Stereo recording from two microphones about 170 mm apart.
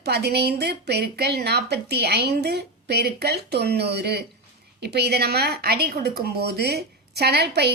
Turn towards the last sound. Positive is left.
turn(degrees=-75)  # may be behind; listen again after turning